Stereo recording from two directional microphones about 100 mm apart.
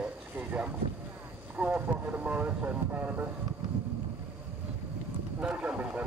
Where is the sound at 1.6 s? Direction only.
15° right (ahead or behind).